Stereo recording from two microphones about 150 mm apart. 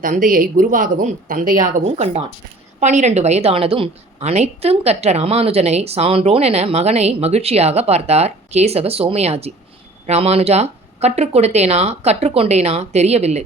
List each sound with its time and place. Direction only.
0.0 s speech: 65° right (ahead or behind)
1.8 s a woman's voice: 45° right (ahead or behind)